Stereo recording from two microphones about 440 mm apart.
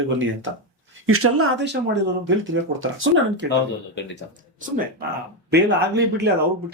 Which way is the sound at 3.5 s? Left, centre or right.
Left.